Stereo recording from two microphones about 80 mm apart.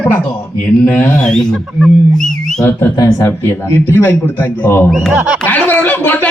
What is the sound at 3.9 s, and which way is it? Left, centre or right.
Speech, left.